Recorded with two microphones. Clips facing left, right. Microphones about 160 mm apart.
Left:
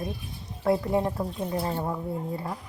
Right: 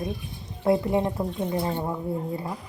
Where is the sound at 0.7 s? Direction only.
5° left (ahead or behind).